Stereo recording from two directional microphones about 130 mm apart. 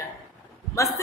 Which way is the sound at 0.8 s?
25° left (ahead or behind).